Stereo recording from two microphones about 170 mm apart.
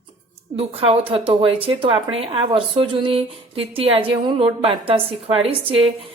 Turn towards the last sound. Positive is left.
turn(degrees=-30)  # may be behind; listen again after turning